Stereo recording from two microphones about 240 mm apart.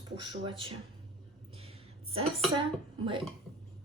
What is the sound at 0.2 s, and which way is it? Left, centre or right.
Speech, right.